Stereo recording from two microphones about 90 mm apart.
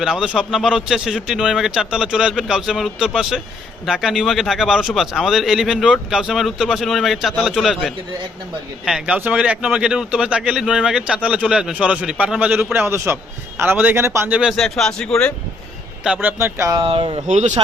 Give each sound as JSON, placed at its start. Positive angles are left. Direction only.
{"t": 0.0, "sound": "speech", "side_deg": -5}
{"t": 12.7, "sound": "speech", "side_deg": -25}
{"t": 14.3, "sound": "speech", "side_deg": -15}
{"t": 14.5, "sound": "speech", "side_deg": 5}
{"t": 16.2, "sound": "speech", "side_deg": -25}
{"t": 16.8, "sound": "speech", "side_deg": -75}